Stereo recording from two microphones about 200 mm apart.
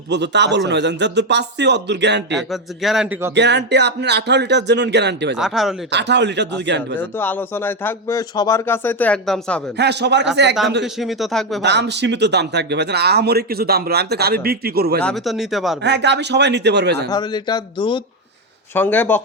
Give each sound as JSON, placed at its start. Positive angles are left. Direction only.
{"t": 0.1, "sound": "speech", "side_deg": -60}
{"t": 2.3, "sound": "speech", "side_deg": 0}
{"t": 3.3, "sound": "speech", "side_deg": -60}
{"t": 5.4, "sound": "speech", "side_deg": 0}
{"t": 5.9, "sound": "speech", "side_deg": -60}
{"t": 7.2, "sound": "speech", "side_deg": 10}
{"t": 9.7, "sound": "speech", "side_deg": -60}
{"t": 11.0, "sound": "speech", "side_deg": 0}
{"t": 11.6, "sound": "speech", "side_deg": -60}
{"t": 15.0, "sound": "speech", "side_deg": 0}
{"t": 15.8, "sound": "speech", "side_deg": -60}
{"t": 17.1, "sound": "speech", "side_deg": 20}
{"t": 18.7, "sound": "speech", "side_deg": 10}